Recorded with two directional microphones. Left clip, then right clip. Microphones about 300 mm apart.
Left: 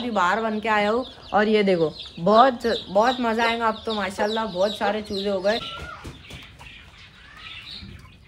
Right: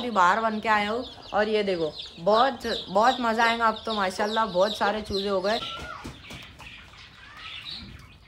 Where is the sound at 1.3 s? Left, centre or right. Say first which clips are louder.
Left 5 dB; left.